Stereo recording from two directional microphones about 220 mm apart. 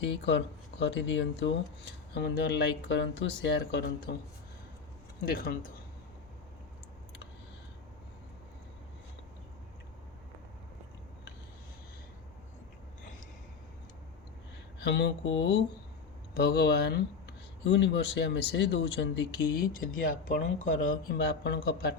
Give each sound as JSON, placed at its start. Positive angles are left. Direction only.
{"t": 0.0, "sound": "speech", "side_deg": 55}
{"t": 5.2, "sound": "speech", "side_deg": 40}
{"t": 14.8, "sound": "speech", "side_deg": 50}